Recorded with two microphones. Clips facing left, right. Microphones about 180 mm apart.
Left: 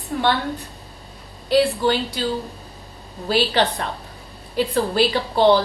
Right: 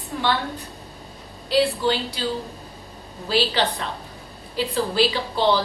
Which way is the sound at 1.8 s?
55° left (ahead or behind).